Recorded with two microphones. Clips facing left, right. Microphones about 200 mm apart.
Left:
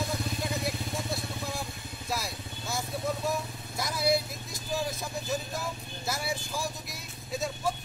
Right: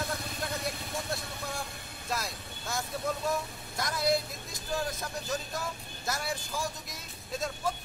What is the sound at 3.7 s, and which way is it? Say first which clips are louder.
Speech: left 1 dB; 5° left (ahead or behind).